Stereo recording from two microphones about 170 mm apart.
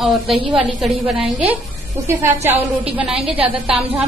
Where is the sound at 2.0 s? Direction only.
15° right (ahead or behind).